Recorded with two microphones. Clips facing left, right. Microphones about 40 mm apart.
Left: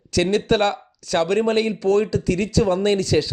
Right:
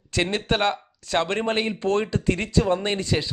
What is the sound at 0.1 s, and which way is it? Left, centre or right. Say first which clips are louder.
A man's voice: left 5 dB; right.